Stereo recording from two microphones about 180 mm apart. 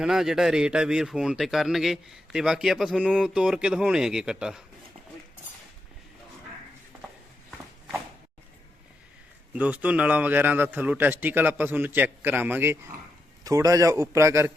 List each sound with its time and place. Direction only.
0.0 s speech: centre (ahead or behind)
9.5 s a man's voice: 5° right (ahead or behind)